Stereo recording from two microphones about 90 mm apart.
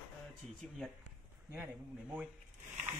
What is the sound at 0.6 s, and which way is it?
Speech, 5° left (ahead or behind).